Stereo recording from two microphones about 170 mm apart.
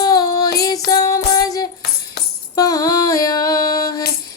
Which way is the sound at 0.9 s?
20° left (ahead or behind).